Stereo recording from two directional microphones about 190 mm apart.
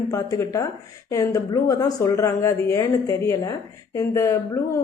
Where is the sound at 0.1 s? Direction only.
15° left (ahead or behind).